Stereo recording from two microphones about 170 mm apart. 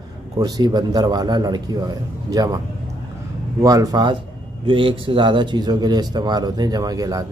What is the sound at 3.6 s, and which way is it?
Speech, 20° right (ahead or behind).